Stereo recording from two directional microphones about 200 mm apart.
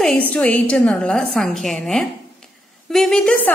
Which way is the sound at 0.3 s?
5° left (ahead or behind).